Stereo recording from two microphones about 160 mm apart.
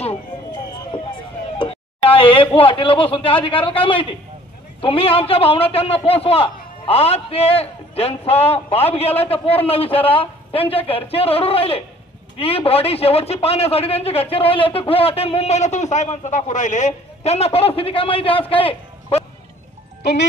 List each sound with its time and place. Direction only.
0.0 s a sound: 35° left (ahead or behind)
4.8 s a man's voice: 35° left (ahead or behind)
20.0 s speech: 90° left